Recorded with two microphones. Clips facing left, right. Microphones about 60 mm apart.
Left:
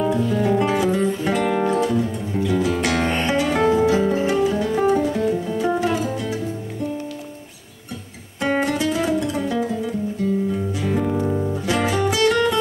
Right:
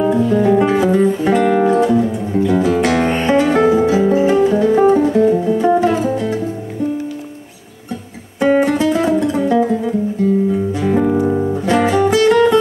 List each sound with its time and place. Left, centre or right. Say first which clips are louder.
0.0 s music: right 6 dB; centre
8.4 s guitar: right 8 dB; centre
10.5 s music: right 7 dB; centre
11.2 s music: right 6 dB; right
11.5 s music: right 7 dB; centre